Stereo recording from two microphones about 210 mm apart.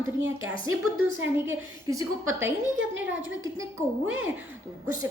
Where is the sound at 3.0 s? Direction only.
10° right (ahead or behind).